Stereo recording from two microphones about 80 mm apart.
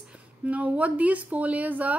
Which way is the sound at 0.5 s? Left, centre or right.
Centre.